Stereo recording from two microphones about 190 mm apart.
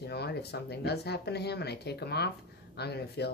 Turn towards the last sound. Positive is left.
turn(degrees=60)  # may be behind; listen again after turning